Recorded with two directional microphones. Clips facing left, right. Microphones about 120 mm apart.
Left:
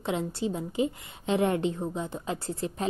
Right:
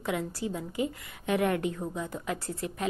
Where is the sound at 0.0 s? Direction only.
25° left (ahead or behind).